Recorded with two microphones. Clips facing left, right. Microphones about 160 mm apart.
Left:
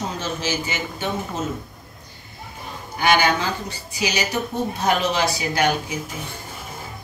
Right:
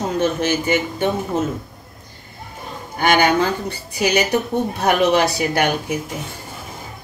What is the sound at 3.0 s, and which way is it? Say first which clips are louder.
Speech: right 3 dB; 50° right (ahead or behind).